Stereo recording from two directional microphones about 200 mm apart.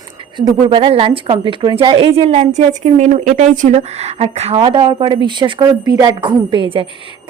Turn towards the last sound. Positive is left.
turn(degrees=-25)  # may be behind; listen again after turning